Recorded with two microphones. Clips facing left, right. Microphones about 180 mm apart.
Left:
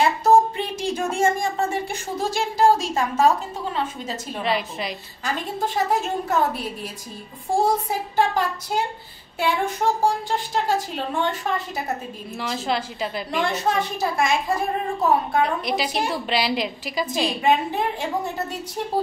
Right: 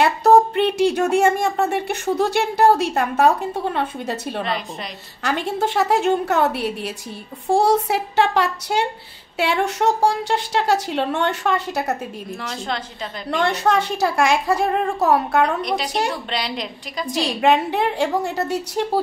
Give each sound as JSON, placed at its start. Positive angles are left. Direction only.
{"t": 0.0, "sound": "speech", "side_deg": -70}
{"t": 4.5, "sound": "a woman's voice", "side_deg": 5}
{"t": 5.2, "sound": "a woman's voice", "side_deg": -75}
{"t": 12.4, "sound": "a woman's voice", "side_deg": 5}
{"t": 13.4, "sound": "a woman's voice", "side_deg": -75}
{"t": 15.6, "sound": "a woman's voice", "side_deg": 5}
{"t": 17.1, "sound": "a woman's voice", "side_deg": -75}